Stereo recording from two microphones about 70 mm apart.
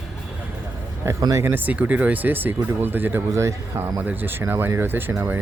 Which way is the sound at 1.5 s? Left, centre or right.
Right.